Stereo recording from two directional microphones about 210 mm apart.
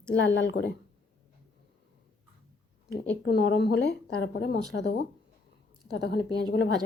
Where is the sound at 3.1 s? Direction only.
55° left (ahead or behind).